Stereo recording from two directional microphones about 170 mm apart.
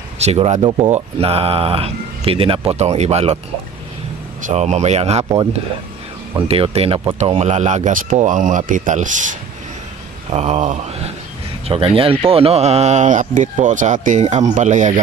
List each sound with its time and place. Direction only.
0.2 s speech: 40° right (ahead or behind)
4.5 s speech: 45° right (ahead or behind)
6.3 s speech: 35° right (ahead or behind)